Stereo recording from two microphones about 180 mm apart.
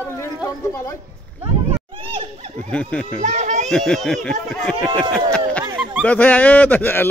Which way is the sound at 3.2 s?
45° right (ahead or behind).